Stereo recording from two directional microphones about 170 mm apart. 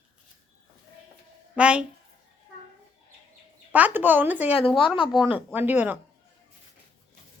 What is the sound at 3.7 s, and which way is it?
Speech, 10° right (ahead or behind).